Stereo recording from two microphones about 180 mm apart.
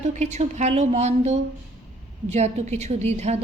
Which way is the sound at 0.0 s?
40° right (ahead or behind).